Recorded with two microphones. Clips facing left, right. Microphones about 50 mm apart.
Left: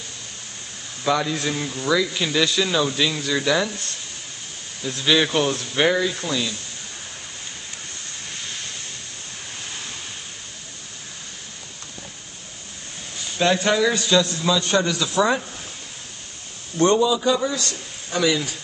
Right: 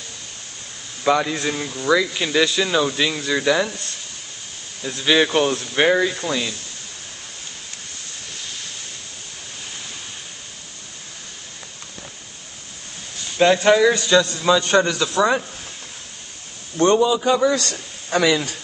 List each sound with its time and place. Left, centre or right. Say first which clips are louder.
1.0 s speech: right 3 dB; centre
4.8 s speech: right 2 dB; centre
13.7 s speech: right 4 dB; centre
14.5 s speech: right 6 dB; right
14.9 s speech: right 2 dB; centre
16.7 s speech: right 2 dB; centre
17.0 s a man's voice: right 2 dB; right
17.4 s a man's voice: right 6 dB; right